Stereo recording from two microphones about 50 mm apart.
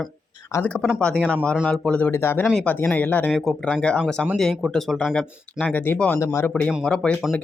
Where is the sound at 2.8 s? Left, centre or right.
Left.